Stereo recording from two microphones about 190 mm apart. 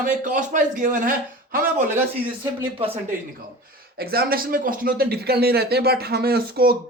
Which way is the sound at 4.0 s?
50° right (ahead or behind).